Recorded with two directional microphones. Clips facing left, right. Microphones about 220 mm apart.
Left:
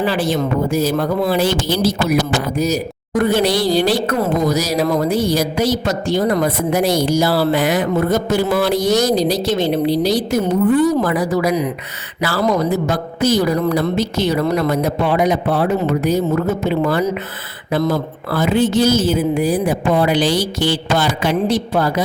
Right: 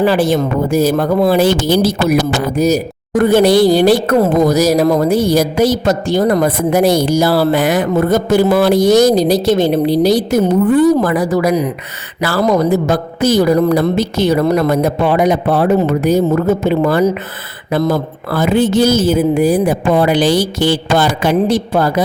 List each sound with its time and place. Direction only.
0.0 s a woman's voice: 50° right (ahead or behind)